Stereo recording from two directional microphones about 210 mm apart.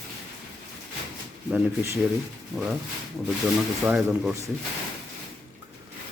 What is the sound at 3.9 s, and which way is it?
Speech, 5° right (ahead or behind).